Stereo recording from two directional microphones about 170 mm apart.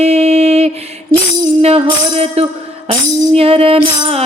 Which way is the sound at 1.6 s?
40° right (ahead or behind).